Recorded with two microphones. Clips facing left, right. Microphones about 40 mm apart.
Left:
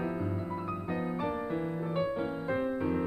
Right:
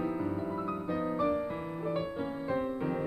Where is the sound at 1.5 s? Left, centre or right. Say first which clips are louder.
Left 2 dB; centre.